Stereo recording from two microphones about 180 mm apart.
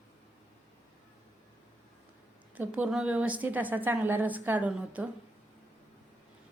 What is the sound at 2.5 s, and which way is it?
A woman's voice, 10° right (ahead or behind).